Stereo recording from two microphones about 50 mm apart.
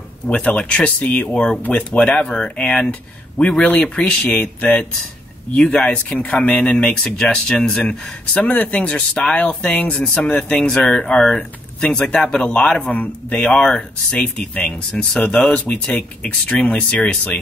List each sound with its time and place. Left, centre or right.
0.3 s speech: left
5.6 s speech: centre; by 6.6 s left
6.6 s speech: centre; by 10.4 s left
10.5 s speech: centre
12.9 s speech: left
14.2 s speech: left
14.9 s speech: centre